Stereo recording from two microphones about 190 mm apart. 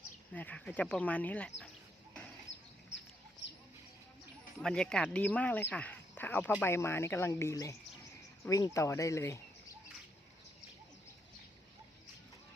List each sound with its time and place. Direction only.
0.3 s speech: 5° left (ahead or behind)
4.6 s speech: 5° left (ahead or behind)